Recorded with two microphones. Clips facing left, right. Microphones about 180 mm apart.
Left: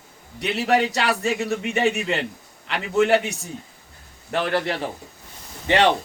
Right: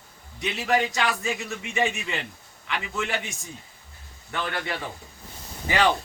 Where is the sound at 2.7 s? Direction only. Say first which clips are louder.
Left 11 dB; 70° left (ahead or behind).